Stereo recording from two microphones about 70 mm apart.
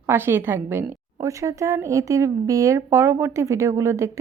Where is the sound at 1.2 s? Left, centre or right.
Right.